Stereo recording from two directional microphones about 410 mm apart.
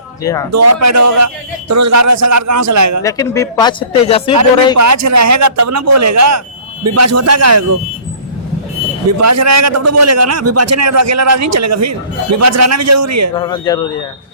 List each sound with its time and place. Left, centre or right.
0.2 s speech: centre
0.5 s a man's voice: right
3.0 s speech: centre
4.8 s a man's voice: right
9.0 s a man's voice: right
13.3 s speech: centre